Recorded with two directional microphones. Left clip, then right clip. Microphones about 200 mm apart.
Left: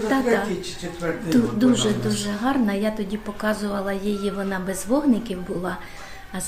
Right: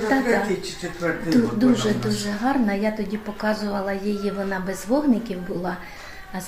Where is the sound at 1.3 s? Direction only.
Centre (ahead or behind).